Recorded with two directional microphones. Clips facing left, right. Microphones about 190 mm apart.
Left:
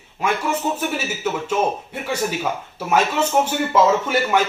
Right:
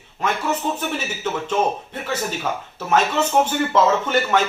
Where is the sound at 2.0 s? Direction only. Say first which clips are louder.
Left 2 dB; 10° left (ahead or behind).